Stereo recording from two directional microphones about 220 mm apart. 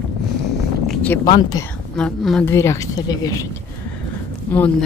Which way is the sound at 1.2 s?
20° left (ahead or behind).